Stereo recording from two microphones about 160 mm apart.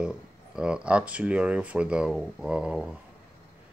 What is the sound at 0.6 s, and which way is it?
Speech, 5° right (ahead or behind).